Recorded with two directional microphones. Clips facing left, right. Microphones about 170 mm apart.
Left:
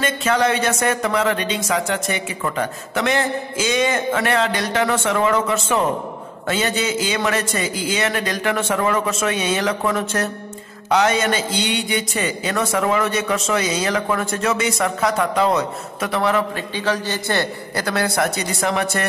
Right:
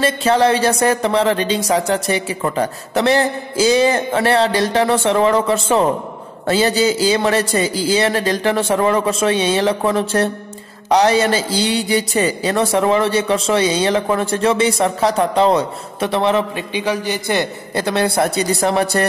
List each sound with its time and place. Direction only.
0.0 s speech: 30° right (ahead or behind)
16.7 s a man's voice: 15° right (ahead or behind); by 19.0 s 35° right (ahead or behind)